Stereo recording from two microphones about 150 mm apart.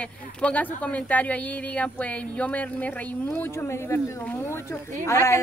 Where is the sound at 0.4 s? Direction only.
10° left (ahead or behind).